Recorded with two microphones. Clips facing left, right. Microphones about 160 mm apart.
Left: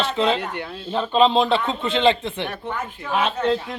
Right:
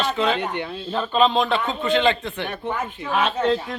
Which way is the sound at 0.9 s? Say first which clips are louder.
Left 2 dB; 20° left (ahead or behind).